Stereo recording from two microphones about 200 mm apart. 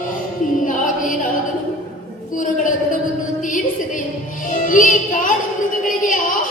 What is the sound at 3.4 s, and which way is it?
Music, 40° left (ahead or behind).